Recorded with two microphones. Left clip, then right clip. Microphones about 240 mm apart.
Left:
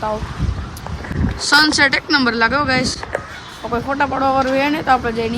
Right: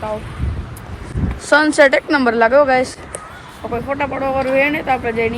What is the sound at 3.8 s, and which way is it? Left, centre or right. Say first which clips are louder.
Speech: left 3 dB; centre.